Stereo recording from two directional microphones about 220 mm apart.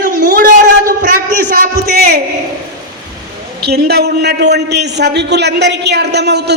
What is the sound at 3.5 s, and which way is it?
A man's voice, 50° right (ahead or behind).